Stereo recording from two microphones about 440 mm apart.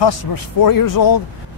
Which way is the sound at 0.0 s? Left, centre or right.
Left.